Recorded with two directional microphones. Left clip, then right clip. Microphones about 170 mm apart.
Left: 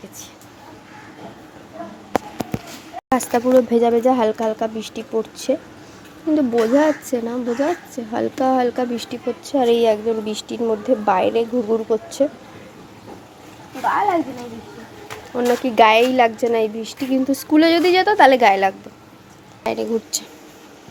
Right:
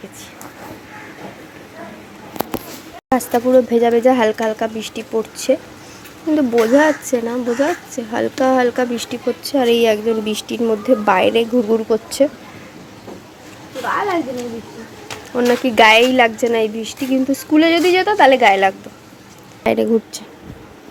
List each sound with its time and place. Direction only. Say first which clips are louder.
3.1 s speech: right 2 dB; centre (ahead or behind)
15.4 s speech: right 2 dB; centre (ahead or behind)
19.6 s speech: right 6 dB; 25° right (ahead or behind)